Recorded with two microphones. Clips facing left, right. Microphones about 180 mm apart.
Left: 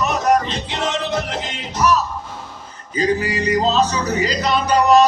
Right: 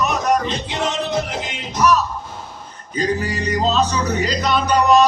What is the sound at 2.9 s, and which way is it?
Music, 5° left (ahead or behind).